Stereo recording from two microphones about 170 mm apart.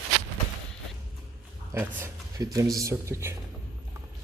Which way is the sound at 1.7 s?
15° right (ahead or behind).